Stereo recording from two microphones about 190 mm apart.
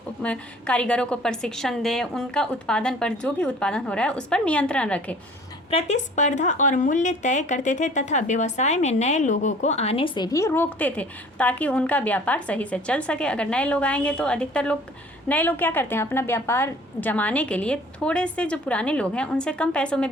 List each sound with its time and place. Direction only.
0.2 s a woman's voice: 5° left (ahead or behind)
5.7 s speech: 40° left (ahead or behind)
10.3 s a woman's voice: 15° left (ahead or behind)